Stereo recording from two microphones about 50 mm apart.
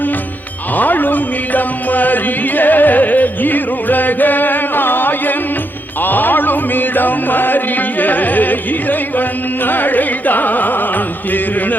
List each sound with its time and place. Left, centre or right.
0.8 s music: left